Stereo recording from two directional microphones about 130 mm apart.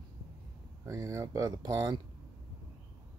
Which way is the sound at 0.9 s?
25° right (ahead or behind).